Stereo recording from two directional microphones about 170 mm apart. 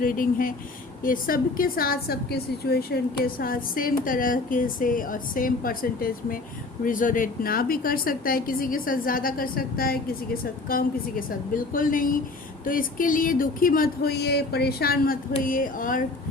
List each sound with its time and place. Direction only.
0.0 s a woman's voice: 55° left (ahead or behind)